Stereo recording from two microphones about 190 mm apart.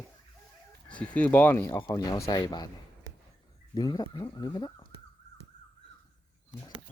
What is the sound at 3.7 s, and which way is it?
Speech, 20° left (ahead or behind).